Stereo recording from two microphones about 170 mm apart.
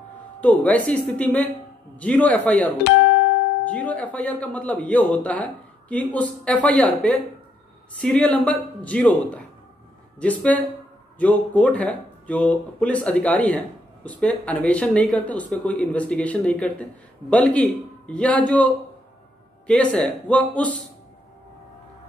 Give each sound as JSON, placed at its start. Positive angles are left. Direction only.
{"t": 0.4, "sound": "speech", "side_deg": 10}
{"t": 2.8, "sound": "music", "side_deg": 90}
{"t": 3.6, "sound": "speech", "side_deg": 10}